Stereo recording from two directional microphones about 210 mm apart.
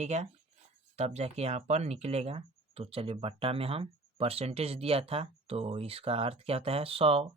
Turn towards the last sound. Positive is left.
turn(degrees=-25)  # may be behind; listen again after turning